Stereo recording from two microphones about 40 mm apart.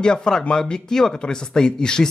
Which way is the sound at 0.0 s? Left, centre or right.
Centre.